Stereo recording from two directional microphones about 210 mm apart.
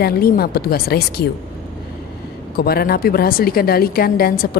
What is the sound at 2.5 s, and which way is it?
A woman's voice, 45° left (ahead or behind).